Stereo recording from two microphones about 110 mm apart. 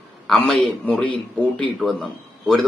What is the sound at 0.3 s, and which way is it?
A man's voice, 5° left (ahead or behind).